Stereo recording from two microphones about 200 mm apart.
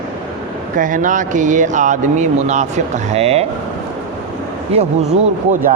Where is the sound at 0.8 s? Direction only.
40° right (ahead or behind).